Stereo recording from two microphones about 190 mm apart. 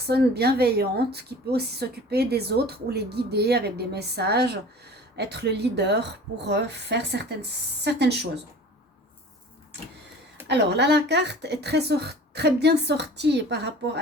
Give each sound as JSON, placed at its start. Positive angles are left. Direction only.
{"t": 0.0, "sound": "a woman's voice", "side_deg": -55}
{"t": 10.4, "sound": "a woman's voice", "side_deg": -60}